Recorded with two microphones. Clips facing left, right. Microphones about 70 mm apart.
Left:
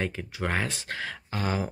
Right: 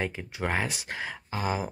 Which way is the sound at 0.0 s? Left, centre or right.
Centre.